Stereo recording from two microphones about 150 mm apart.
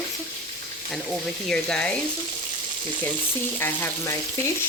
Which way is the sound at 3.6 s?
15° left (ahead or behind).